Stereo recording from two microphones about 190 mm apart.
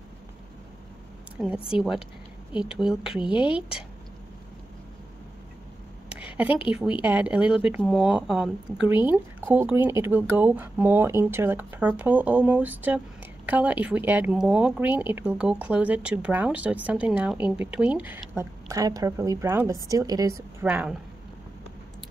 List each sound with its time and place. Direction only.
1.4 s a woman's voice: centre (ahead or behind)
6.1 s a sound: 10° right (ahead or behind)
6.7 s speech: 5° right (ahead or behind)
20.6 s speech: 5° right (ahead or behind)